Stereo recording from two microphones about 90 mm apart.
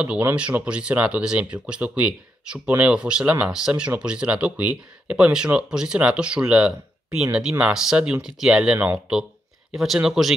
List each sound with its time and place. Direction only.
0.4 s speech: 15° right (ahead or behind)